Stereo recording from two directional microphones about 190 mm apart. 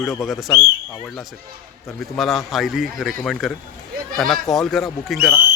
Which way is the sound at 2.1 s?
Centre (ahead or behind).